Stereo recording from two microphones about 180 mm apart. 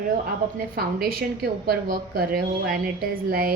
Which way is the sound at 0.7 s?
55° right (ahead or behind).